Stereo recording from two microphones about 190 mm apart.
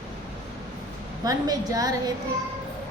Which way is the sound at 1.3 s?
20° right (ahead or behind).